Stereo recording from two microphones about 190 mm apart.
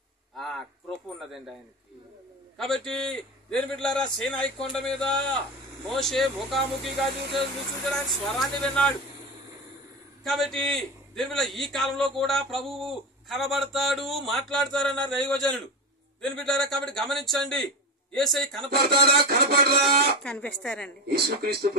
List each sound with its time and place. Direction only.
0.4 s a sound: centre (ahead or behind)
2.5 s a man's voice: centre (ahead or behind)
10.2 s a man's voice: centre (ahead or behind)
18.7 s speech: 55° right (ahead or behind)
20.2 s a man's voice: 5° left (ahead or behind)
21.4 s speech: 55° right (ahead or behind)